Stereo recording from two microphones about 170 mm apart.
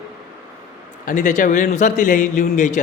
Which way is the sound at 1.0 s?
45° left (ahead or behind).